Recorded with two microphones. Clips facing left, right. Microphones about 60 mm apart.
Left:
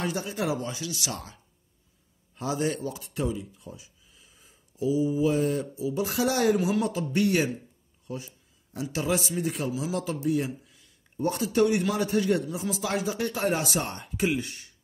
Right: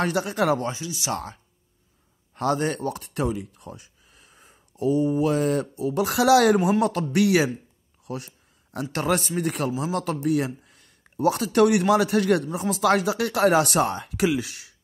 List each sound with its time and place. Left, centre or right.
0.0 s a man's voice: right
0.7 s speech: right
1.1 s speech: right
2.3 s a man's voice: right
8.0 s a sound: right
8.9 s a man's voice: right
12.4 s speech: right